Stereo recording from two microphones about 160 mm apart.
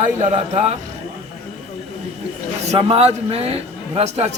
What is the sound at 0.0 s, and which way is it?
Speech, 50° right (ahead or behind).